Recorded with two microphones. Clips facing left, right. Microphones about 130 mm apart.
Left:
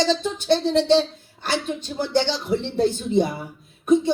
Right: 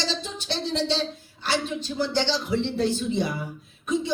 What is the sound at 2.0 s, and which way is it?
Speech, 50° left (ahead or behind).